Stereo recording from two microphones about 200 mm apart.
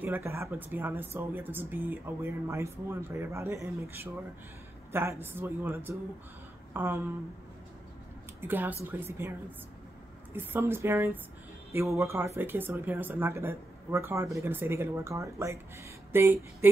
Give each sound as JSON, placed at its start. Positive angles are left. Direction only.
{"t": 0.0, "sound": "speech", "side_deg": -15}
{"t": 8.4, "sound": "speech", "side_deg": -10}
{"t": 10.3, "sound": "speech", "side_deg": -10}